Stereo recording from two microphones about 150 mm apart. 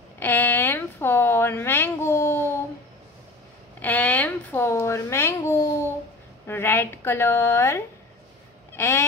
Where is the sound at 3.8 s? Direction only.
10° left (ahead or behind).